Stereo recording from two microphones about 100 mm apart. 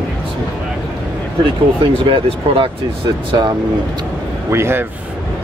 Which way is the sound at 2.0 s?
60° right (ahead or behind).